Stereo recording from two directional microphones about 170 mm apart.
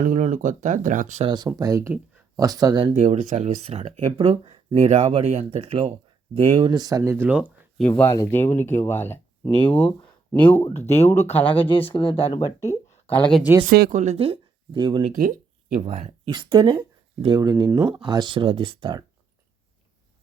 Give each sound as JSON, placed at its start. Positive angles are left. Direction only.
{"t": 0.0, "sound": "speech", "side_deg": -50}
{"t": 1.3, "sound": "speech", "side_deg": -25}
{"t": 2.8, "sound": "speech", "side_deg": -45}
{"t": 6.7, "sound": "speech", "side_deg": -20}
{"t": 7.8, "sound": "speech", "side_deg": 10}
{"t": 11.9, "sound": "speech", "side_deg": 30}
{"t": 12.5, "sound": "speech", "side_deg": 15}
{"t": 13.7, "sound": "speech", "side_deg": -65}
{"t": 13.9, "sound": "speech", "side_deg": -45}
{"t": 15.1, "sound": "speech", "side_deg": -50}
{"t": 15.8, "sound": "speech", "side_deg": -40}
{"t": 16.3, "sound": "speech", "side_deg": -30}
{"t": 18.0, "sound": "speech", "side_deg": -25}